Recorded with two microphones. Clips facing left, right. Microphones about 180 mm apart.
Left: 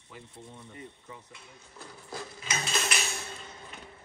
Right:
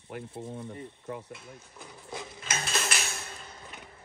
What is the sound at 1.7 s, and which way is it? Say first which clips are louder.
Speech: even; 15° right (ahead or behind).